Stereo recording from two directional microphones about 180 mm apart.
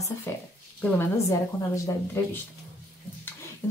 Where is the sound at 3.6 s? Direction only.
10° left (ahead or behind).